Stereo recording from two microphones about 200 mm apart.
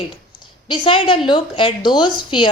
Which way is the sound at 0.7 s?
25° left (ahead or behind).